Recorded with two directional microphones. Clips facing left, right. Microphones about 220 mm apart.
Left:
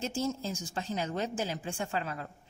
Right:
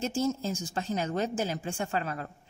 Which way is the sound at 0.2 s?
45° right (ahead or behind).